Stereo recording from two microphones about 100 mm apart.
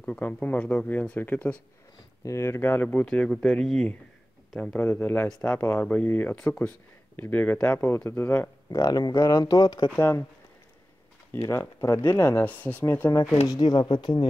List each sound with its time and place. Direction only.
0.0 s speech: 15° left (ahead or behind)
2.2 s speech: 30° left (ahead or behind)
8.6 s speech: 35° left (ahead or behind)
9.9 s speech: 25° left (ahead or behind)
11.8 s speech: 30° left (ahead or behind)
13.5 s speech: 50° left (ahead or behind)